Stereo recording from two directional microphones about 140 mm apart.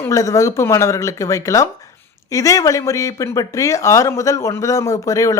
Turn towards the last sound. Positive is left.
turn(degrees=25)  # may be behind; listen again after turning